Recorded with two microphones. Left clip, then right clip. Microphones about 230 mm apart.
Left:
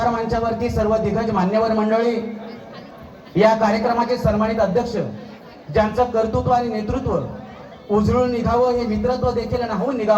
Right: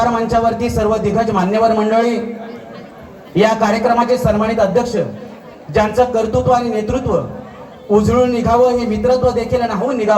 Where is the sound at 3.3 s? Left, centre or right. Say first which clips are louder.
Right 2 dB; right.